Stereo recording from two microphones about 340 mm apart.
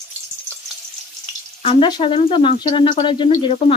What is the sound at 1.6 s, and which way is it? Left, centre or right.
Speech, centre.